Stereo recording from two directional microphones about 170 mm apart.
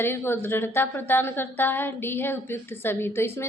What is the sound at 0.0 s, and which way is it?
A woman's voice, 15° left (ahead or behind).